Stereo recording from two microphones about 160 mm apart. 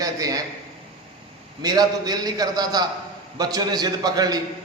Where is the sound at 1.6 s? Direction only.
25° right (ahead or behind).